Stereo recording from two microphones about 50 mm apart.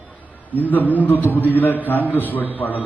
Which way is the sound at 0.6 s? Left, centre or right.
Left.